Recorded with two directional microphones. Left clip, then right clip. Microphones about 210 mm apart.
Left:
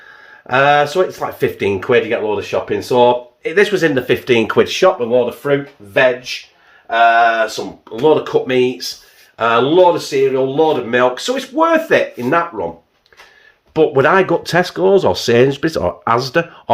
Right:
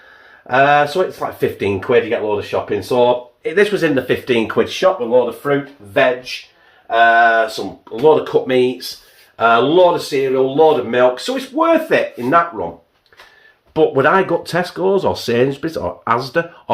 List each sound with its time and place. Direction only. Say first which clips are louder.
0.5 s speech: even; 25° left (ahead or behind); by 5.5 s 45° left (ahead or behind)
6.8 s speech: even; 30° left (ahead or behind); by 8.9 s 15° left (ahead or behind)
9.4 s speech: even; 25° left (ahead or behind)
13.7 s speech: left 1 dB; 30° left (ahead or behind)